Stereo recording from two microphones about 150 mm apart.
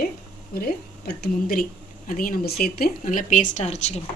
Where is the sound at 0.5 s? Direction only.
85° left.